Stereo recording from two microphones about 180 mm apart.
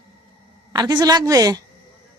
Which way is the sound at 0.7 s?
25° right (ahead or behind).